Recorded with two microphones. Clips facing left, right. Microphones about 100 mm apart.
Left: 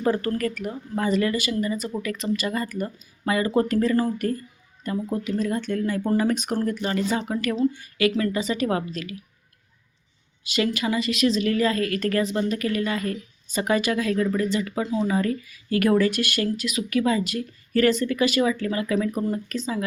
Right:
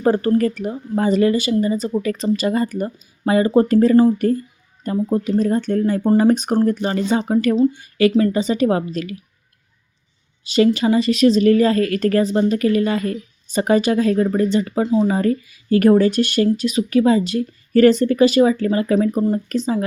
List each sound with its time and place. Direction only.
0.0 s a woman's voice: 30° right (ahead or behind)
10.4 s a woman's voice: 35° right (ahead or behind)